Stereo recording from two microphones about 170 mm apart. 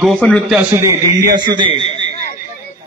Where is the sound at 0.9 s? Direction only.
25° right (ahead or behind).